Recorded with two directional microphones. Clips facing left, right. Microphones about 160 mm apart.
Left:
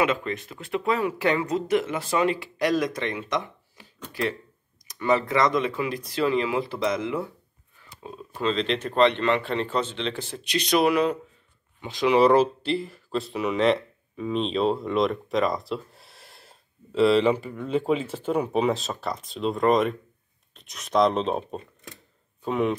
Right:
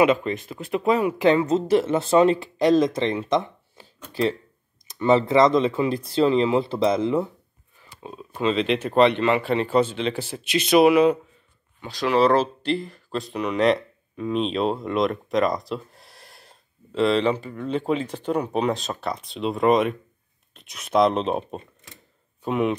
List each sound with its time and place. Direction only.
0.0 s speech: 20° right (ahead or behind)
8.0 s speech: 5° right (ahead or behind)
11.8 s speech: 15° left (ahead or behind); by 22.8 s centre (ahead or behind)